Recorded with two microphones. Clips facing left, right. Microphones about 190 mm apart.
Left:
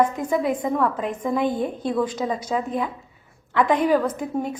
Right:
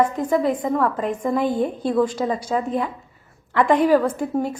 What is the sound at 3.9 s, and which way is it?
Speech, centre (ahead or behind).